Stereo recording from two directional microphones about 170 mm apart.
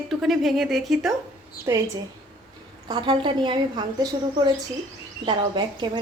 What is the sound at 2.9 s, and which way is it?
A woman's voice, 25° right (ahead or behind).